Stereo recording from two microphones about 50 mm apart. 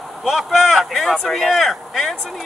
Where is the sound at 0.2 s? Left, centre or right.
Centre.